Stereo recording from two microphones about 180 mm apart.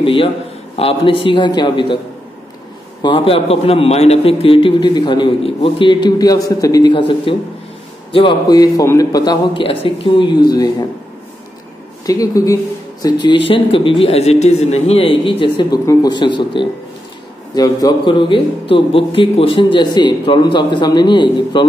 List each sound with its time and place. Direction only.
0.0 s a man's voice: 30° left (ahead or behind)
3.0 s a man's voice: 30° left (ahead or behind)
12.1 s a man's voice: 20° left (ahead or behind)